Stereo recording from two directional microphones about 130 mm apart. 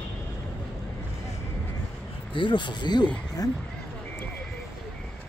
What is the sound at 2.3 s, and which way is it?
Speech, 40° left (ahead or behind).